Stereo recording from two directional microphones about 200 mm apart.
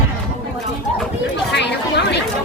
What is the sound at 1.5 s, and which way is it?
Chatter, 60° left (ahead or behind).